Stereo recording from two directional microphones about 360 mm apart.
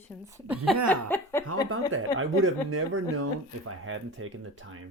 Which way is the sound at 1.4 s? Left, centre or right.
Right.